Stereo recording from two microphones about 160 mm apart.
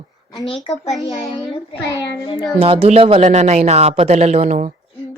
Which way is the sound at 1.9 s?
25° left (ahead or behind).